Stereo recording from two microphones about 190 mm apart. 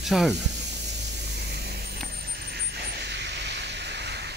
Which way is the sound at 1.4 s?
60° right (ahead or behind).